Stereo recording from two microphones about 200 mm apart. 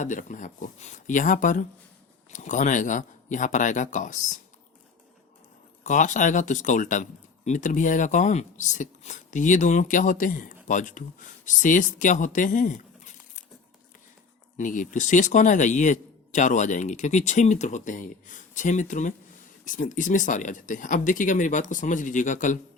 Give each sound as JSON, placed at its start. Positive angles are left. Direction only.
{"t": 0.0, "sound": "speech", "side_deg": 40}
{"t": 5.8, "sound": "speech", "side_deg": 40}
{"t": 14.6, "sound": "speech", "side_deg": 40}